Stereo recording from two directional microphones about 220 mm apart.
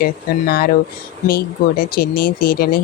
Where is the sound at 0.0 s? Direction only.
45° left (ahead or behind).